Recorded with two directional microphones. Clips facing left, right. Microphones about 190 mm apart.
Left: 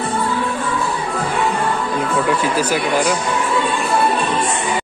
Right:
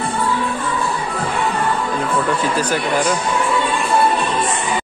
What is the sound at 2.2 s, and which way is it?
Speech, 10° left (ahead or behind).